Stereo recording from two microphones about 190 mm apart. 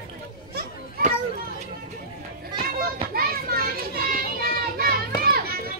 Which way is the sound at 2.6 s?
50° right (ahead or behind).